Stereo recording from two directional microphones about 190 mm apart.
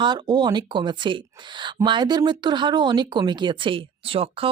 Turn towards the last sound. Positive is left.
turn(degrees=-30)  # may be behind; listen again after turning